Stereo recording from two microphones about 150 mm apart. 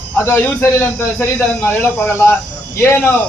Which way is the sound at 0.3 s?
15° left (ahead or behind).